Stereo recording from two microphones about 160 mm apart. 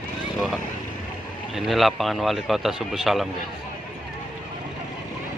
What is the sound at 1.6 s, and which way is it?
A man's voice, centre (ahead or behind).